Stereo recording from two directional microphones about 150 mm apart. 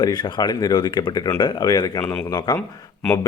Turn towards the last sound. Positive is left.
turn(degrees=10)  # may be behind; listen again after turning